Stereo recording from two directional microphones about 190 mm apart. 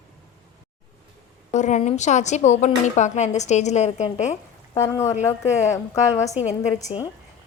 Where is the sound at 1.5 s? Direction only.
40° left (ahead or behind).